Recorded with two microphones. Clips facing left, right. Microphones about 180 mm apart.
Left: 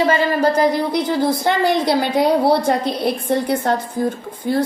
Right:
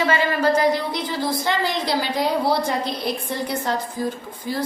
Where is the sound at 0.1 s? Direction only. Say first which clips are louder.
Left 3 dB; 50° left (ahead or behind).